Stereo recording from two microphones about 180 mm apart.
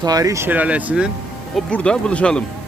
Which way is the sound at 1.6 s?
5° left (ahead or behind).